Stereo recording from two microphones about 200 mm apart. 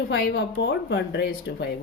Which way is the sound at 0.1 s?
60° left (ahead or behind).